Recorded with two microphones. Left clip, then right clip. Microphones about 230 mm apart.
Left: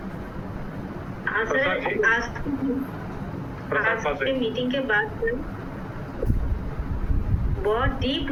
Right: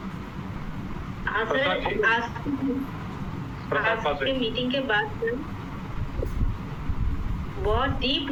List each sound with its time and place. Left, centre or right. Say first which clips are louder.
1.2 s a woman's voice: left 2 dB; centre
3.7 s a woman's voice: left 1 dB; centre
7.6 s a woman's voice: left 1 dB; centre